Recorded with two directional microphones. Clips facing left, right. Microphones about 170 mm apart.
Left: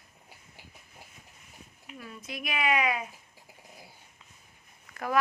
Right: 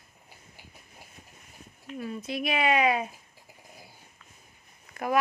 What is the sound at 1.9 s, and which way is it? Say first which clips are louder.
Speech: right 8 dB; 30° right (ahead or behind).